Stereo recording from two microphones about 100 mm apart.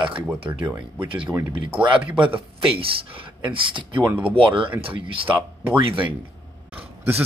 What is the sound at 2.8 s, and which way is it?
Speech, 65° right (ahead or behind).